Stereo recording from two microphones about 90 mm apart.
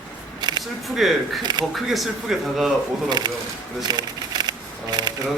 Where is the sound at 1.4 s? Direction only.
50° right (ahead or behind).